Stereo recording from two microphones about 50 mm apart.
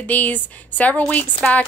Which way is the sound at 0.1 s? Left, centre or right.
Left.